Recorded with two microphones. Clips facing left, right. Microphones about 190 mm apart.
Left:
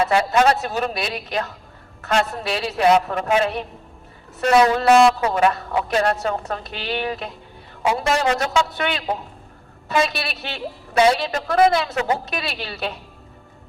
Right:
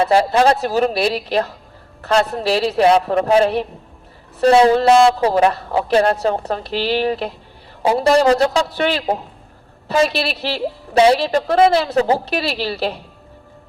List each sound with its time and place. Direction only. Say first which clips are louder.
0.0 s a woman's voice: right 3 dB; 35° right (ahead or behind)